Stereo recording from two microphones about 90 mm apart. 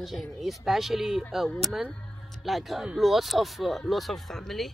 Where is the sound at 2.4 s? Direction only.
Centre (ahead or behind).